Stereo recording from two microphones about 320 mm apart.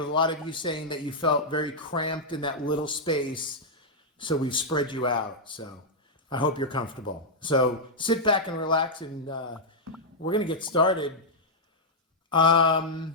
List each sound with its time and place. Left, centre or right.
0.0 s speech: centre
12.3 s speech: centre